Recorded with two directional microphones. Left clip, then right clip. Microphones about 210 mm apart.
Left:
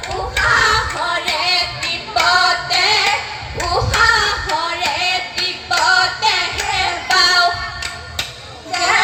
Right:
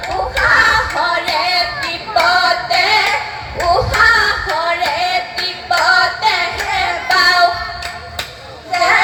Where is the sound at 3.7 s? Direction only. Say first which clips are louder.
Right 3 dB; 45° right (ahead or behind).